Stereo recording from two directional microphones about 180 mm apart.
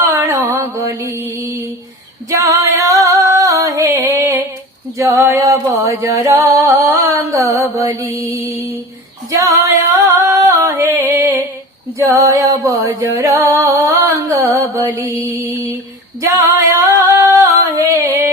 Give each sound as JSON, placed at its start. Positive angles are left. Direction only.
{"t": 0.0, "sound": "mantra", "side_deg": -15}
{"t": 2.3, "sound": "female singing", "side_deg": -15}
{"t": 4.9, "sound": "music", "side_deg": -15}
{"t": 10.2, "sound": "music", "side_deg": -15}
{"t": 16.2, "sound": "female singing", "side_deg": -15}